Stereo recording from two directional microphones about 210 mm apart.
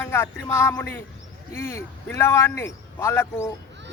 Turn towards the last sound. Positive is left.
turn(degrees=10)  # may be behind; listen again after turning